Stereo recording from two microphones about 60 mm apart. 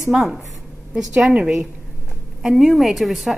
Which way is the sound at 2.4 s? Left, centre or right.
Centre.